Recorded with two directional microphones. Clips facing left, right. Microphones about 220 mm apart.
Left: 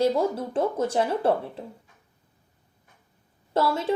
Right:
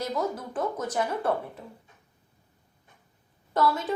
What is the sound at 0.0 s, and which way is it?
A woman's voice, 30° left (ahead or behind).